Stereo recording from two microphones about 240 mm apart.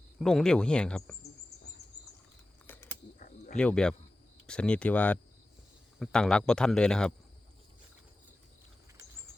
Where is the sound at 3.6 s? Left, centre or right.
Centre.